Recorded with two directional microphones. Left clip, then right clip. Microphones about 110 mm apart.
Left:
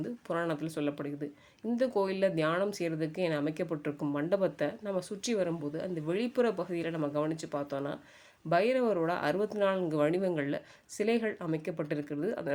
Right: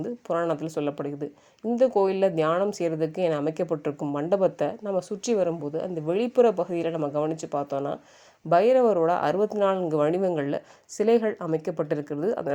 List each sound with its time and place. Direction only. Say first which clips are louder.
0.0 s speech: right 7 dB; 25° right (ahead or behind)